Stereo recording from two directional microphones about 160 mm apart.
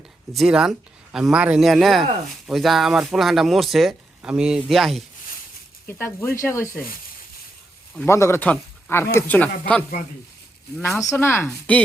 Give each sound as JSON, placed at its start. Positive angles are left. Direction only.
{"t": 0.3, "sound": "speech", "side_deg": -5}
{"t": 5.9, "sound": "speech", "side_deg": 15}
{"t": 8.0, "sound": "speech", "side_deg": 15}
{"t": 11.0, "sound": "speech", "side_deg": 15}